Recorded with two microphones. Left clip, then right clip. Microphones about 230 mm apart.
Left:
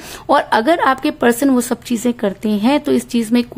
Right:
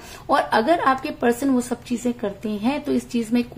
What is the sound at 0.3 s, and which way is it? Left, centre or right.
Speech, left.